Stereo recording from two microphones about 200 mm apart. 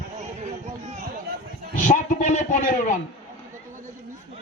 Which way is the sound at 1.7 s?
40° left (ahead or behind).